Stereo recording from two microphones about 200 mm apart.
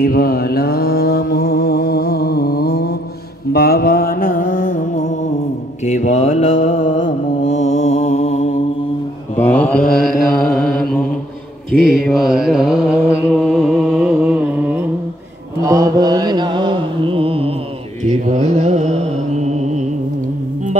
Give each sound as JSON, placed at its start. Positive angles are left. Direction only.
{"t": 0.0, "sound": "mantra", "side_deg": 45}
{"t": 3.5, "sound": "music", "side_deg": 50}
{"t": 5.9, "sound": "mantra", "side_deg": 35}
{"t": 9.4, "sound": "mantra", "side_deg": 10}